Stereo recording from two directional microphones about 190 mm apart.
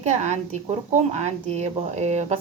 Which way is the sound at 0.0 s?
40° right (ahead or behind).